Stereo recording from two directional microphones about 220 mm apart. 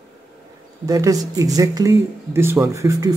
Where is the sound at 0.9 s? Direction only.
15° right (ahead or behind).